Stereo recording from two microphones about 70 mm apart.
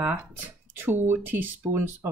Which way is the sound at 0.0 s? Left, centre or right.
Right.